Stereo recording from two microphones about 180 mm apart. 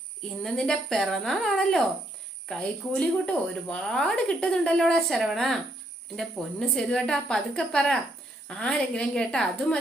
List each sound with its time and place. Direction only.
0.4 s a woman's voice: 5° left (ahead or behind)